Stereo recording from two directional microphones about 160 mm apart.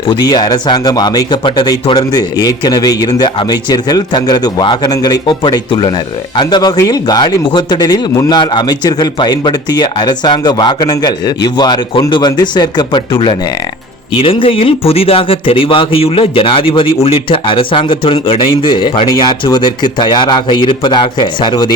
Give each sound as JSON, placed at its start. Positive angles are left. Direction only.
{"t": 0.1, "sound": "a man's voice", "side_deg": 25}